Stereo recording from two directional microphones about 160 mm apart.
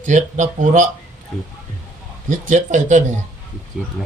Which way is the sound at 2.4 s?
50° right (ahead or behind).